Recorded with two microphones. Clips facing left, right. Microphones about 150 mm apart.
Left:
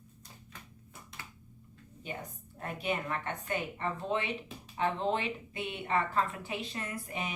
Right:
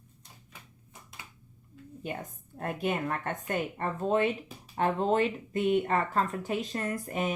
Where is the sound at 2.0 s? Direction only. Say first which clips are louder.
Right 4 dB; 50° right (ahead or behind).